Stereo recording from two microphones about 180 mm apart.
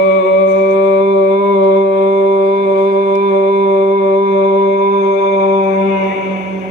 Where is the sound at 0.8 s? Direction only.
40° right (ahead or behind).